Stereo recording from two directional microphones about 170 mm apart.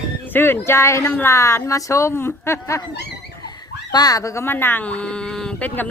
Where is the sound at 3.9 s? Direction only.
20° left (ahead or behind).